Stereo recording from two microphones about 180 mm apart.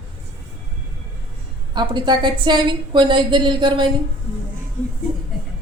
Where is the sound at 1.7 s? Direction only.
25° right (ahead or behind).